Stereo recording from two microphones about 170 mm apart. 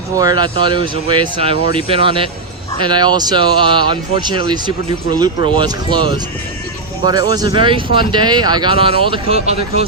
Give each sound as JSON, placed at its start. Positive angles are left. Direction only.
{"t": 0.2, "sound": "speech", "side_deg": -25}